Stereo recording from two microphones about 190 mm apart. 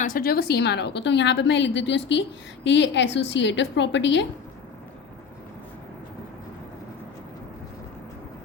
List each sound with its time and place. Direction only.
0.0 s a woman's voice: 50° left (ahead or behind); by 4.3 s 70° left (ahead or behind)